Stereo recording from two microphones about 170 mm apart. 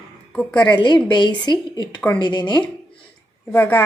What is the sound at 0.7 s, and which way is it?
A woman's voice, 25° left (ahead or behind).